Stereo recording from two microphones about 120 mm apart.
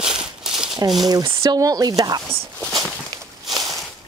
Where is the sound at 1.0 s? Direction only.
30° right (ahead or behind).